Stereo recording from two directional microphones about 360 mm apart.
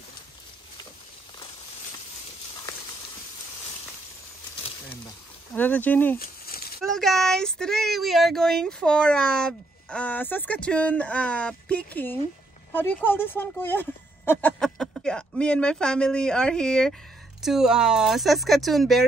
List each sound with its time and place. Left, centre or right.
5.5 s speech: centre
6.1 s a sound: left
6.8 s speech: centre